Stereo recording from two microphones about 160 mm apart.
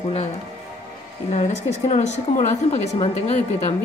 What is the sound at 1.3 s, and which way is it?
A woman's voice, 40° left (ahead or behind).